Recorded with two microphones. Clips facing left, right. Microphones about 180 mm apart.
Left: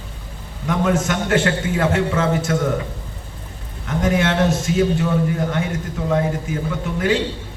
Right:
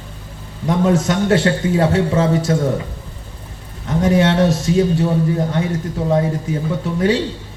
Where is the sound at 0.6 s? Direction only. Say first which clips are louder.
Right 3 dB; 35° right (ahead or behind).